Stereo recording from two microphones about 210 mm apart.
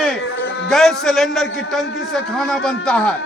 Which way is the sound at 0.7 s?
Centre (ahead or behind).